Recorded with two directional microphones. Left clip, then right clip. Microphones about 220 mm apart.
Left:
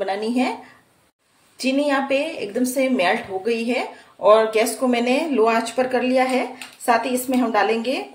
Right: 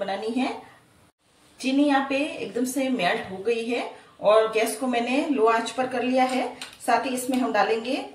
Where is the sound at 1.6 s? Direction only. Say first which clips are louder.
Left 2 dB; 50° left (ahead or behind).